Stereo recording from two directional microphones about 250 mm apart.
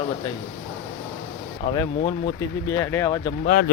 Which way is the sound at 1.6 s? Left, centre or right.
Left.